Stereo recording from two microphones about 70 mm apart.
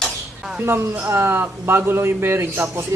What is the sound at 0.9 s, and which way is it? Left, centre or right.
A man's voice, right.